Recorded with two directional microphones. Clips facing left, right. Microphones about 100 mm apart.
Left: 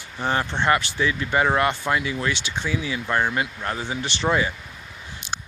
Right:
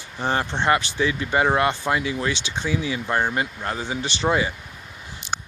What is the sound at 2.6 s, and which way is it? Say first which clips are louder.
Speech: right 2 dB; 35° right (ahead or behind).